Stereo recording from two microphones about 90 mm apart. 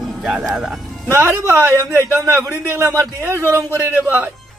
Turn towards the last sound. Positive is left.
turn(degrees=-20)  # may be behind; listen again after turning